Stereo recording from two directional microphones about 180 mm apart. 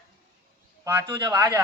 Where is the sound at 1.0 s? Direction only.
25° right (ahead or behind).